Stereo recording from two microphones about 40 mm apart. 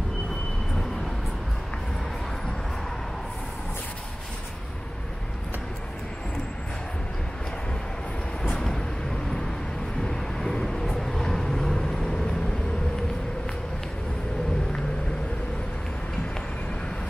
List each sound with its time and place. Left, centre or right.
8.5 s vehicle: centre
10.0 s vehicle: centre